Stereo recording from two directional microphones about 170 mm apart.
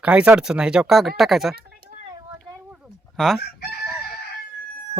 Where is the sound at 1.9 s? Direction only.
35° right (ahead or behind).